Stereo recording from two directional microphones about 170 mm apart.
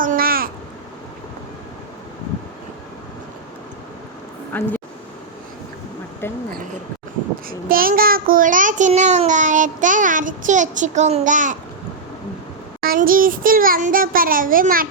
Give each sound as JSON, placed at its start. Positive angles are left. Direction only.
{"t": 0.0, "sound": "babbling", "side_deg": -55}
{"t": 4.5, "sound": "speech", "side_deg": 10}
{"t": 6.2, "sound": "speech", "side_deg": 15}
{"t": 7.7, "sound": "child singing", "side_deg": -55}
{"t": 12.8, "sound": "child singing", "side_deg": -55}